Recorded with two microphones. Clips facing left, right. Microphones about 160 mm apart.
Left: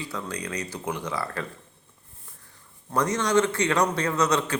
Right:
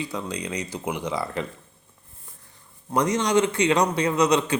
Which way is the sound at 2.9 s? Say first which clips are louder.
Right 2 dB; 15° right (ahead or behind).